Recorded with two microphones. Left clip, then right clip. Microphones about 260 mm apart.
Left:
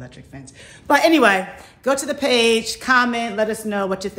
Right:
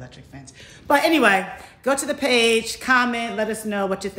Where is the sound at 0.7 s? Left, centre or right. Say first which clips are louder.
Left 3 dB; left.